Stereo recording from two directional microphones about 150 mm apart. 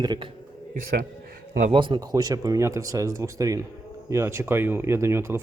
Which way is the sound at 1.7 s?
35° right (ahead or behind).